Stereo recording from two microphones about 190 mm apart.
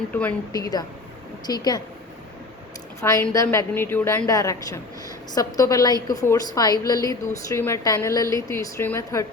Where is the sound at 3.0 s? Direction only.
10° left (ahead or behind).